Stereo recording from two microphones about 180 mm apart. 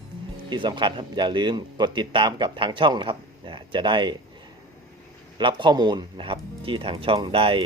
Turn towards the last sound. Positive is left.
turn(degrees=-30)  # may be behind; listen again after turning